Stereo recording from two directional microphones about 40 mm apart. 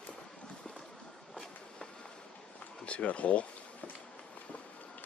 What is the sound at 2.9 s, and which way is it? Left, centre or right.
Speech, left.